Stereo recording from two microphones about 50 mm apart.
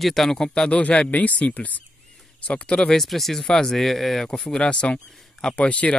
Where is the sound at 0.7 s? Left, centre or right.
Left.